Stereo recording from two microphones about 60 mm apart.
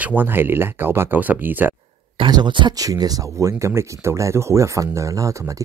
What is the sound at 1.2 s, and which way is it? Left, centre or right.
Speech, right.